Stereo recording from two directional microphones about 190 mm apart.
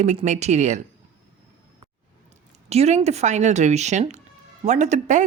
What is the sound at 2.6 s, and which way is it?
A woman's voice, 35° right (ahead or behind).